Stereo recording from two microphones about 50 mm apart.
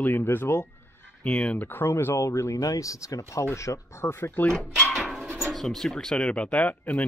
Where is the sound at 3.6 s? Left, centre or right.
Left.